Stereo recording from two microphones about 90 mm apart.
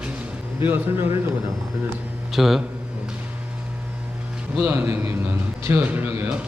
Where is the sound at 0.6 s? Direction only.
25° right (ahead or behind).